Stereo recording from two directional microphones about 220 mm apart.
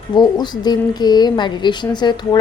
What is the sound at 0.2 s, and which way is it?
A woman's voice, 20° left (ahead or behind).